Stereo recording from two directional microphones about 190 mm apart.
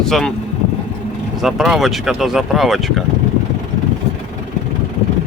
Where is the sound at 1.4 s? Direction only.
Centre (ahead or behind).